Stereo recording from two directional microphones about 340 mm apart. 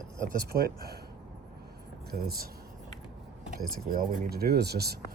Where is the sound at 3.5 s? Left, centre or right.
Right.